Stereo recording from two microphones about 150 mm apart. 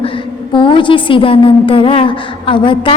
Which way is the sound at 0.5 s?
35° left (ahead or behind).